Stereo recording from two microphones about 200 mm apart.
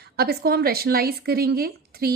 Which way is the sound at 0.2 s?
50° right (ahead or behind).